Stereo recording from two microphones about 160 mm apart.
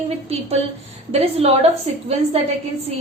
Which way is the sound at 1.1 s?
40° right (ahead or behind).